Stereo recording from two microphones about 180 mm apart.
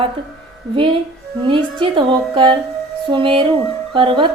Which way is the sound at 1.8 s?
25° right (ahead or behind).